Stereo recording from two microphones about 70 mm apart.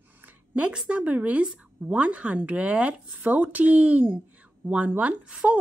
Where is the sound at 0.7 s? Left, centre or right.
Centre.